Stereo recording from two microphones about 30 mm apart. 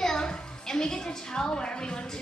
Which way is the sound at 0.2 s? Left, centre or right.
Left.